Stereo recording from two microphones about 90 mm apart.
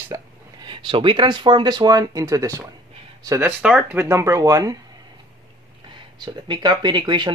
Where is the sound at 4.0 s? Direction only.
35° right (ahead or behind).